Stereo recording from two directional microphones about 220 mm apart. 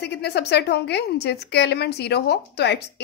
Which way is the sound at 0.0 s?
50° left (ahead or behind).